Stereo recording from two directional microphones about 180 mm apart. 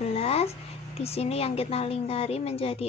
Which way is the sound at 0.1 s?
35° left (ahead or behind).